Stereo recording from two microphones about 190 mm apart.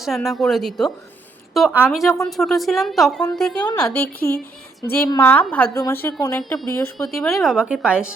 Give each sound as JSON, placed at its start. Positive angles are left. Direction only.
{"t": 0.0, "sound": "a woman's voice", "side_deg": 0}
{"t": 3.7, "sound": "a woman's voice", "side_deg": 20}
{"t": 6.9, "sound": "a woman's voice", "side_deg": 0}